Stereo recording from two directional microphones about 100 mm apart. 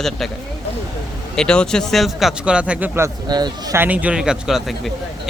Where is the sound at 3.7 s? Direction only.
20° right (ahead or behind); by 4.9 s centre (ahead or behind).